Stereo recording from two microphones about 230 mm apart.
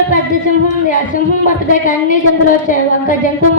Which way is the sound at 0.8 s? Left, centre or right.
Left.